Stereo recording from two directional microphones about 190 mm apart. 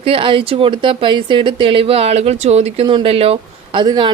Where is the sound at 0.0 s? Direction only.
30° right (ahead or behind).